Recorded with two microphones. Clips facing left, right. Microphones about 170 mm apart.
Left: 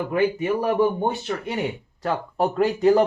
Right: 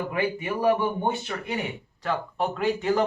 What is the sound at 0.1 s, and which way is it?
Speech, 40° left (ahead or behind).